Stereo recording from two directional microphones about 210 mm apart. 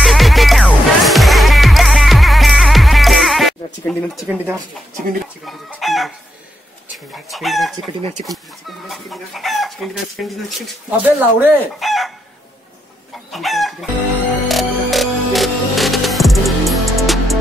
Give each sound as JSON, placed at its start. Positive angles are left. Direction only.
{"t": 0.0, "sound": "music", "side_deg": 0}
{"t": 5.4, "sound": "speech", "side_deg": 0}
{"t": 7.2, "sound": "speech", "side_deg": 0}
{"t": 8.0, "sound": "speech", "side_deg": -35}
{"t": 8.3, "sound": "speech", "side_deg": 0}
{"t": 10.9, "sound": "chicken", "side_deg": -10}
{"t": 13.3, "sound": "speech", "side_deg": 0}
{"t": 14.5, "sound": "music", "side_deg": 0}